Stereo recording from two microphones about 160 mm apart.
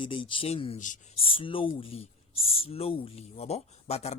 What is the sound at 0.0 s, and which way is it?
Speech, 30° left (ahead or behind).